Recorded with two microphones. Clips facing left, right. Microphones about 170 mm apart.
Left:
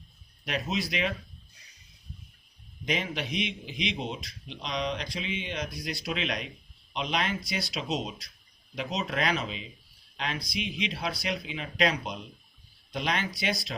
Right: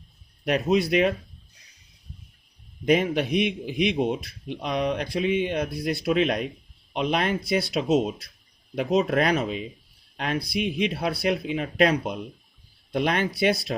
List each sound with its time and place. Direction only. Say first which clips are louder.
0.4 s speech: right 10 dB; 50° right (ahead or behind)
2.8 s a man's voice: right 10 dB; 50° right (ahead or behind)